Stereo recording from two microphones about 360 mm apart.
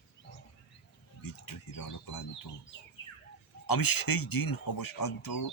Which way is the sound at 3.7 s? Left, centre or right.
Left.